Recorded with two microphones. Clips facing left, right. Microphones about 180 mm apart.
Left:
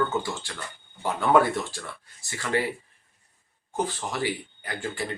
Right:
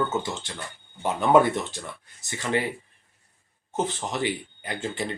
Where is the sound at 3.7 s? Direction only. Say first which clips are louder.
Right 1 dB; 20° right (ahead or behind).